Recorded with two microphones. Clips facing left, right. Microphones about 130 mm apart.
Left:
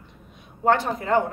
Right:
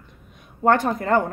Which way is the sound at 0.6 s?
50° right (ahead or behind).